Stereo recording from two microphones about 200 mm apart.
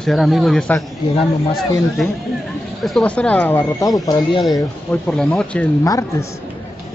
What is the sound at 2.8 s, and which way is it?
Speech, 5° left (ahead or behind).